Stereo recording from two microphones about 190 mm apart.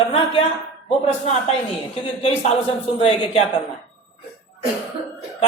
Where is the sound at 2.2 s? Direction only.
30° left (ahead or behind).